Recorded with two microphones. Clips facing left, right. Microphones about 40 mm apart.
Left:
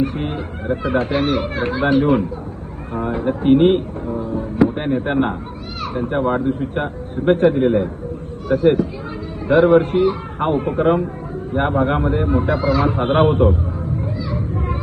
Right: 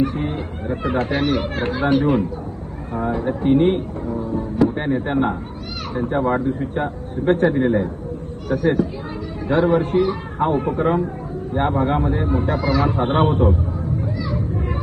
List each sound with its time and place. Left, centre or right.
0.0 s a man's voice: left
4.3 s music: left
5.0 s a man's voice: left
14.3 s vehicle: left